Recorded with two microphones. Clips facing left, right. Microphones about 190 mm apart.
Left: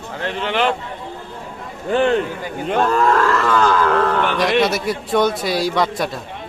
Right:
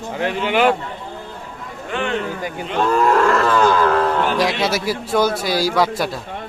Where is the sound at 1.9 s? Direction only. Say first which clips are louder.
Left 8 dB; 35° left (ahead or behind).